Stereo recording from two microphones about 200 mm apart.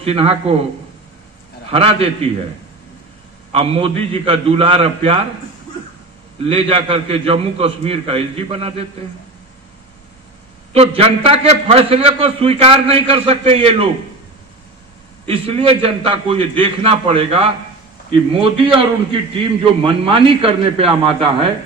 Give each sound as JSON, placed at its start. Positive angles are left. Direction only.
{"t": 0.0, "sound": "a man's voice", "side_deg": -30}
{"t": 1.7, "sound": "a man's voice", "side_deg": -30}
{"t": 3.5, "sound": "a man's voice", "side_deg": -30}
{"t": 6.4, "sound": "a man's voice", "side_deg": -30}
{"t": 10.7, "sound": "a man's voice", "side_deg": -30}
{"t": 15.2, "sound": "a man's voice", "side_deg": -30}